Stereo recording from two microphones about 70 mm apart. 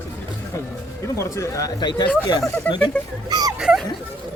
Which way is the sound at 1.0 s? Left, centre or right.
Left.